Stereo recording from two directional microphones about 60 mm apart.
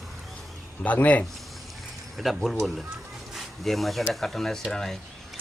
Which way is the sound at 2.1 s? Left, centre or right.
Centre.